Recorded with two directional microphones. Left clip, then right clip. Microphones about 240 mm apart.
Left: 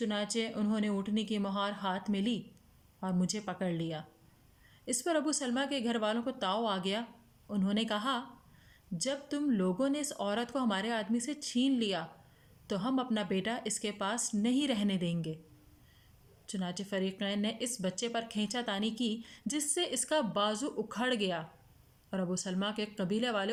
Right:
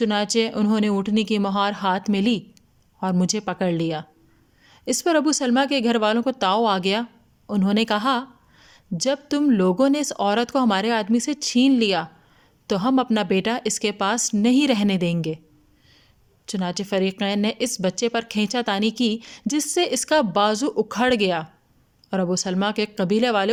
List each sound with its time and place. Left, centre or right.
0.0 s speech: right
16.5 s speech: right